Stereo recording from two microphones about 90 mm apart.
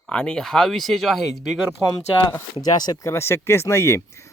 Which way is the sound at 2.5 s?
50° left (ahead or behind).